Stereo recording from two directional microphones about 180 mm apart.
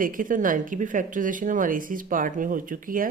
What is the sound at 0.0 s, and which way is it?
Speech, 50° right (ahead or behind).